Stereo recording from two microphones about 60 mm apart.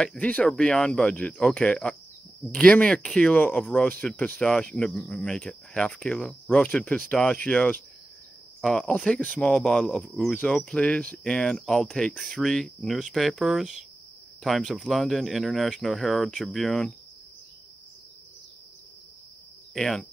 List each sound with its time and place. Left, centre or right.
0.0 s speech: centre
8.6 s speech: centre
9.0 s speech: centre
9.6 s speech: centre
19.7 s speech: centre